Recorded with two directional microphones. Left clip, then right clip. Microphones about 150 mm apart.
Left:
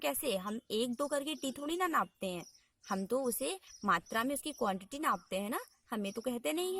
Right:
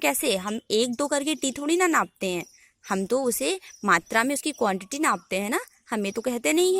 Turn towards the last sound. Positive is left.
turn(degrees=-30)  # may be behind; listen again after turning